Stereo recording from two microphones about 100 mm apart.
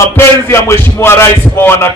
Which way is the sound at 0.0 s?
25° left (ahead or behind).